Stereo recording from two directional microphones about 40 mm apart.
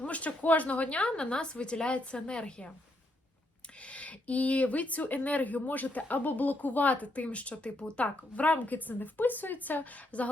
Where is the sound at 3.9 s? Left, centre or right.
Left.